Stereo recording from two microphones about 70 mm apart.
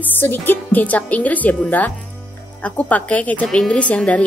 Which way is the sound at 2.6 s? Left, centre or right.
Left.